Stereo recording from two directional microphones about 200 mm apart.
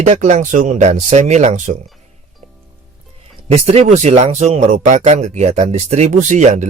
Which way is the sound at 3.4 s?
30° right (ahead or behind).